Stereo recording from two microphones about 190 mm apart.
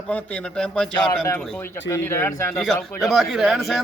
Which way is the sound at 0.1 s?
5° left (ahead or behind).